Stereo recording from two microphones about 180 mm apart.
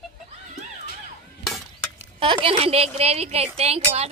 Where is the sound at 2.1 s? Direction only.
30° right (ahead or behind).